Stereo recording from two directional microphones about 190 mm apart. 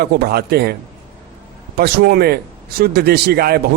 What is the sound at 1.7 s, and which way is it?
A man's voice, 55° right (ahead or behind).